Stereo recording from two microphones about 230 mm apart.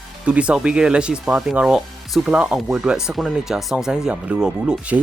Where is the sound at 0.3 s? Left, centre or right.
Centre.